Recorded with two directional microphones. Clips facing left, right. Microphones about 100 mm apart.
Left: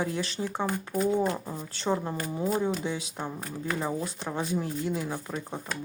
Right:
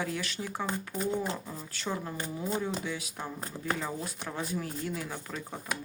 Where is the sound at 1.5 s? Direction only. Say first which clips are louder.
Left 7 dB; 30° left (ahead or behind).